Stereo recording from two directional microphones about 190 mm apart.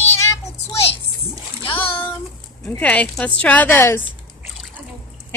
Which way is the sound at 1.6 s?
30° left (ahead or behind).